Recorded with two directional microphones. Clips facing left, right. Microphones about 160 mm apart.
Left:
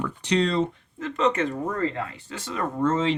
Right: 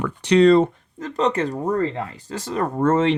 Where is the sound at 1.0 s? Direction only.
35° right (ahead or behind).